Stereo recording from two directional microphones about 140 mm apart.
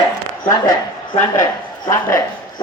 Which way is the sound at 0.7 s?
30° left (ahead or behind).